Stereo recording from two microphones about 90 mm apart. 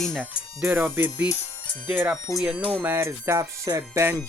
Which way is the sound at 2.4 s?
10° right (ahead or behind).